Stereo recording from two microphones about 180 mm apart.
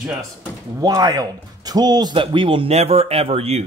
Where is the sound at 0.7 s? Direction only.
20° right (ahead or behind).